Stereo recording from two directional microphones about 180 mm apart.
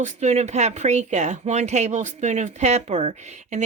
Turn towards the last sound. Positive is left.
turn(degrees=-40)  # may be behind; listen again after turning